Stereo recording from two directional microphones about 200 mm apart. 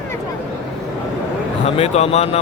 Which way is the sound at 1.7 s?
30° left (ahead or behind).